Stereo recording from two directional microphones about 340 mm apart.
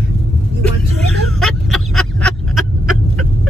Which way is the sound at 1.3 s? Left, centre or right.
Centre.